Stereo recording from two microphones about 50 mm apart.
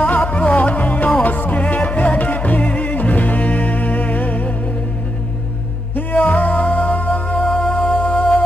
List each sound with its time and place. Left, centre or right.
0.0 s music: left
5.9 s music: left